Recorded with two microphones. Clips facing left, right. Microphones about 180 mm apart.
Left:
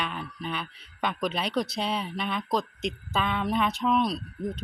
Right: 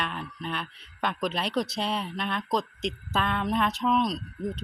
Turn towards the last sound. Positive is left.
turn(degrees=0)  # may be behind; listen again after turning